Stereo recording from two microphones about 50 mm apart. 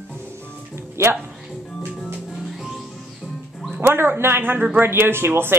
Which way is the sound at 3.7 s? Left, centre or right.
Right.